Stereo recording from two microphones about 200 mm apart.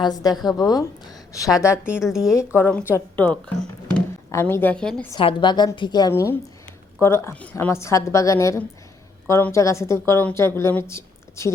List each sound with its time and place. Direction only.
0.0 s a woman's voice: 20° left (ahead or behind)
1.8 s a woman's voice: 5° right (ahead or behind)
2.3 s a woman's voice: 15° left (ahead or behind)
5.1 s a woman's voice: 25° left (ahead or behind)